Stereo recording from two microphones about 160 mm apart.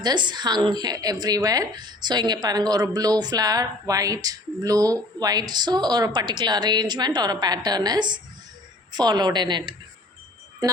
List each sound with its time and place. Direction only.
0.0 s a woman's voice: 25° right (ahead or behind)